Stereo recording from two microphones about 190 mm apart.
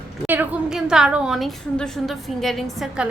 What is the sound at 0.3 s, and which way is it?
A woman's voice, 5° right (ahead or behind).